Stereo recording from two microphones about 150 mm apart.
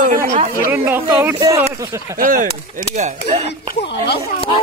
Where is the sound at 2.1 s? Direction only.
70° right (ahead or behind).